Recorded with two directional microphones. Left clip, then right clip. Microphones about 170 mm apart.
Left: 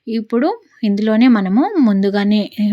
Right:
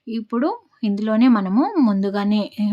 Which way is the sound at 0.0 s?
20° left (ahead or behind).